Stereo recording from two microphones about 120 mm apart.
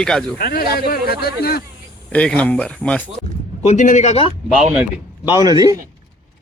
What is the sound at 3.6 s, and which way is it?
Speech, 75° left (ahead or behind).